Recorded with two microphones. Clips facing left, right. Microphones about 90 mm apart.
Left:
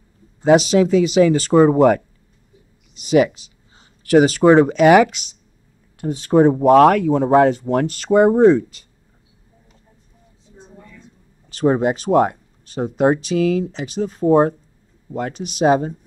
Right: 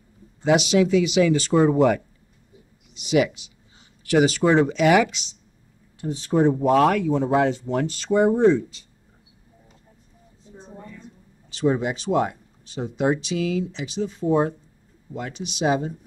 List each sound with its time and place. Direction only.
0.4 s speech: 40° left (ahead or behind)
11.5 s speech: 50° left (ahead or behind)